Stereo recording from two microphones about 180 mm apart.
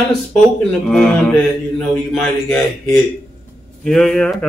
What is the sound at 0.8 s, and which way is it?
A man's voice, 5° left (ahead or behind).